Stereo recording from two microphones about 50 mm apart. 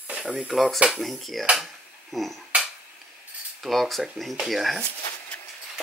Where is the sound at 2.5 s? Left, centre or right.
Right.